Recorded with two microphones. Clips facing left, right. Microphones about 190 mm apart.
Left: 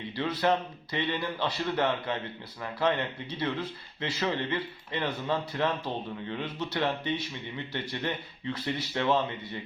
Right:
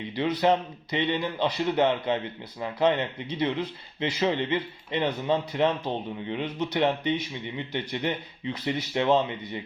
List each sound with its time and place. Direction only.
0.1 s speech: 20° right (ahead or behind)